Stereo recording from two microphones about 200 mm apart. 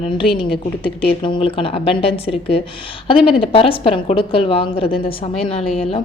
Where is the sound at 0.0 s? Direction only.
25° left (ahead or behind).